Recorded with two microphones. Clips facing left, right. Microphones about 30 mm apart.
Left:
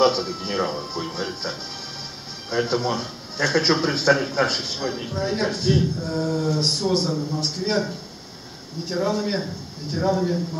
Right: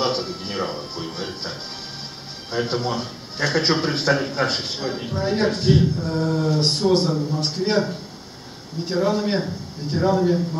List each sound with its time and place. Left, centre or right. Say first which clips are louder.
0.0 s speech: left 4 dB; centre
4.9 s speech: right 2 dB; centre
5.5 s speech: right 3 dB; centre